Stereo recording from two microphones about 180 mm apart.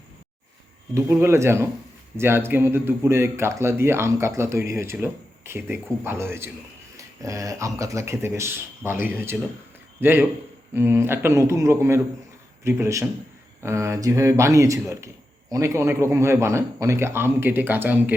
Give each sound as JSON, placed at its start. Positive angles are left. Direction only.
{"t": 0.9, "sound": "a man's voice", "side_deg": -15}